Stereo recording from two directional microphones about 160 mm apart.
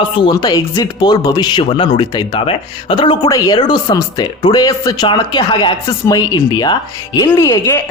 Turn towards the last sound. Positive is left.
turn(degrees=20)  # may be behind; listen again after turning